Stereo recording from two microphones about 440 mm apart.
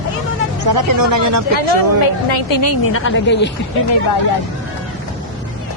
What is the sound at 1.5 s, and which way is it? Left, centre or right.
Speech, left.